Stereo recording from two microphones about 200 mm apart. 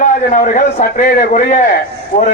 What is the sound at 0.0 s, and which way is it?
Speech, 40° left (ahead or behind).